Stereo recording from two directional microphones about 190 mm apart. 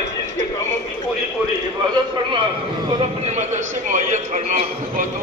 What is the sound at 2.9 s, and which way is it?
A man's voice, 35° right (ahead or behind).